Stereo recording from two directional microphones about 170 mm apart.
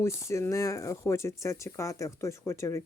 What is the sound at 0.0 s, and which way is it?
Speech, 15° left (ahead or behind).